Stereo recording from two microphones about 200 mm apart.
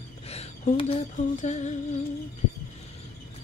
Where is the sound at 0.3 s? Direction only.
30° left (ahead or behind).